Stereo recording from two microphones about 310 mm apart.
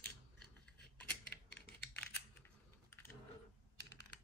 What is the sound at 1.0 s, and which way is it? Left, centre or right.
Typing, centre.